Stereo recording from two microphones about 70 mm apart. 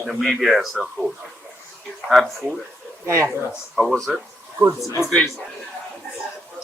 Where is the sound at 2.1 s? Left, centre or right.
Centre.